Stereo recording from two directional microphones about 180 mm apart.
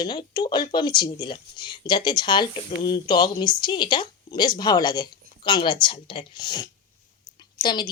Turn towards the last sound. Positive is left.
turn(degrees=25)  # may be behind; listen again after turning